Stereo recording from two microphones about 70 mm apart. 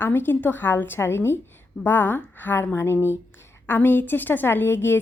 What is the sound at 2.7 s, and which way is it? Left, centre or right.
Speech, left.